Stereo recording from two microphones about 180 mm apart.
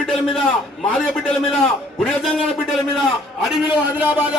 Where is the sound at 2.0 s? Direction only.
Centre (ahead or behind).